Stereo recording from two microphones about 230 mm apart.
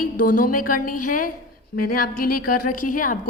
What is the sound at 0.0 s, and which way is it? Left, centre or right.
A woman's voice, left.